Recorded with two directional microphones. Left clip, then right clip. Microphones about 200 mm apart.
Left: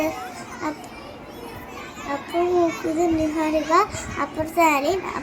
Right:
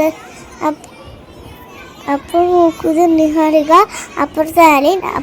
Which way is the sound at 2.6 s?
50° right (ahead or behind).